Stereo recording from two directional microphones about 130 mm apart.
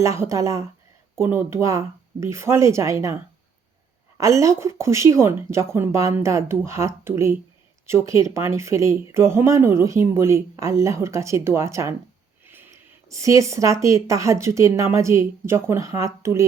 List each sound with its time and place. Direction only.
0.0 s speech: 25° right (ahead or behind)
4.2 s speech: 25° right (ahead or behind)